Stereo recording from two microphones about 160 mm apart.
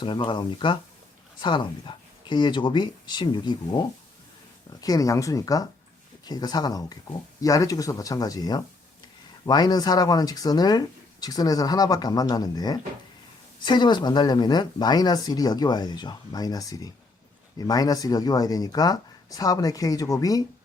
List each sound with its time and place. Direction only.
0.0 s speech: 30° left (ahead or behind)